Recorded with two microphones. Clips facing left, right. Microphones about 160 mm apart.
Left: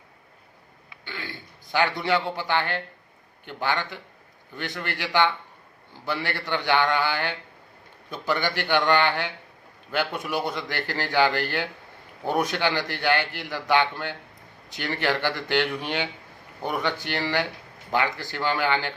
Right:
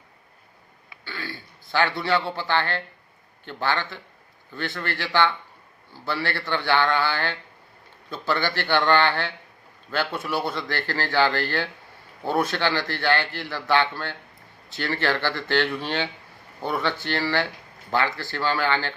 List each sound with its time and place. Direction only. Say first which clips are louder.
1.0 s a man's voice: right 2 dB; 20° left (ahead or behind)